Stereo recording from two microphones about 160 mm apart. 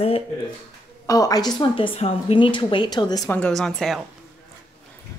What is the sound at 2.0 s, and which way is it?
Speech, 40° left (ahead or behind).